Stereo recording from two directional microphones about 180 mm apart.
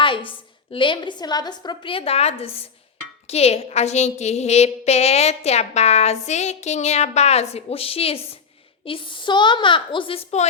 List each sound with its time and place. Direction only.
0.0 s a woman's voice: 30° left (ahead or behind)